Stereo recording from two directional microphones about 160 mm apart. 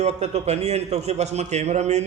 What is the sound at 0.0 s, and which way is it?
A man's voice, 45° right (ahead or behind).